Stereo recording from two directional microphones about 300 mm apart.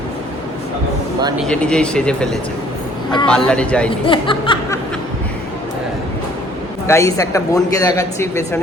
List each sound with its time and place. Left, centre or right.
1.5 s speech: centre
4.0 s a man's voice: centre
6.8 s a man's voice: centre